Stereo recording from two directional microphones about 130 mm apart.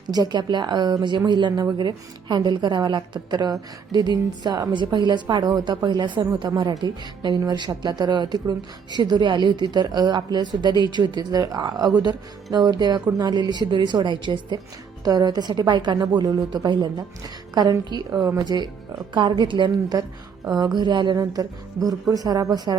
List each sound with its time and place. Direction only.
0.1 s speech: 30° right (ahead or behind)